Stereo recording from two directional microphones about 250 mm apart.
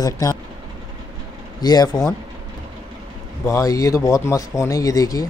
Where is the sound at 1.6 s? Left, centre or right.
Centre.